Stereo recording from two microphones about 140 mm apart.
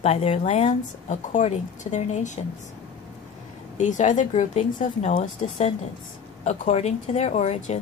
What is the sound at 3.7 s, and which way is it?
Speech, 60° left (ahead or behind).